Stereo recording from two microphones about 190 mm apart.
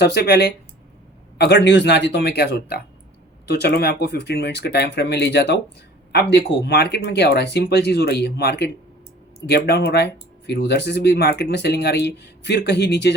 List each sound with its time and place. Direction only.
0.0 s speech: 60° left (ahead or behind)